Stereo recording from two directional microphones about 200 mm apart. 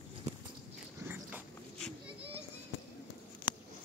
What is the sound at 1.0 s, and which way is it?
Dog, 10° right (ahead or behind).